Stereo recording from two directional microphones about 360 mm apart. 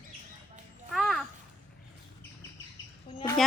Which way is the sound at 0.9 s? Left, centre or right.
Centre.